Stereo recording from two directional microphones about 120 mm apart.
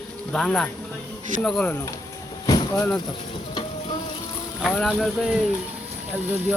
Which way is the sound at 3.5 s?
45° left (ahead or behind).